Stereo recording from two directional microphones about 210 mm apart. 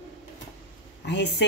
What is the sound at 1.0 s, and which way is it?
Speech, 55° left (ahead or behind).